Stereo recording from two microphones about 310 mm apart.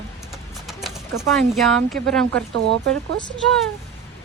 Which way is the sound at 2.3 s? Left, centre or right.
Right.